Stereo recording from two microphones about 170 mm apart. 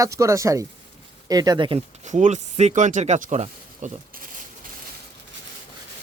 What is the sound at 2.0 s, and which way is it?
Speech, 45° right (ahead or behind).